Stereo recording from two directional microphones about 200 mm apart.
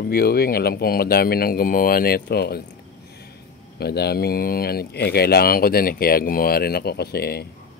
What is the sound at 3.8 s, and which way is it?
Speech, 55° left (ahead or behind).